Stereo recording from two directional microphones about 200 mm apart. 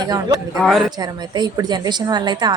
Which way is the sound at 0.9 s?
20° right (ahead or behind).